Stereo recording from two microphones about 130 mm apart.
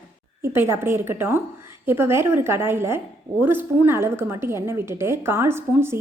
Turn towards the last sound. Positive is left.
turn(degrees=-20)  # may be behind; listen again after turning